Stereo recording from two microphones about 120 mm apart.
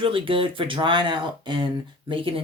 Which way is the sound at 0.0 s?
45° right (ahead or behind).